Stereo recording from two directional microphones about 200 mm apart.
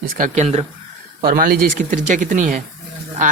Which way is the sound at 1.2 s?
45° right (ahead or behind).